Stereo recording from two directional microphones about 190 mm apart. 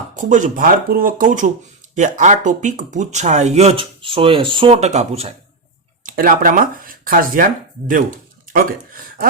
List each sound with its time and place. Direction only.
0.2 s speech: 40° right (ahead or behind)
6.0 s speech: 45° right (ahead or behind)